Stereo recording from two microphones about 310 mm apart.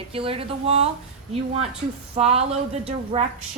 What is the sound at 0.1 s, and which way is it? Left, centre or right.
Speech, centre.